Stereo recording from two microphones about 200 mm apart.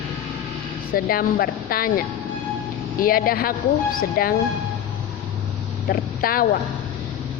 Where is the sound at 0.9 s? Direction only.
45° left (ahead or behind).